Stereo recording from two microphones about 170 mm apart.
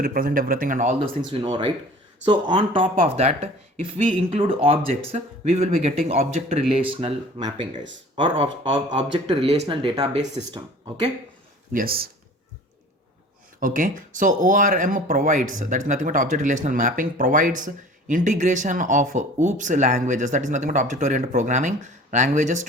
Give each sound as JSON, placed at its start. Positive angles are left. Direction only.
{"t": 0.0, "sound": "speech", "side_deg": -55}
{"t": 1.3, "sound": "speech", "side_deg": -30}
{"t": 11.7, "sound": "speech", "side_deg": -60}
{"t": 13.6, "sound": "speech", "side_deg": -50}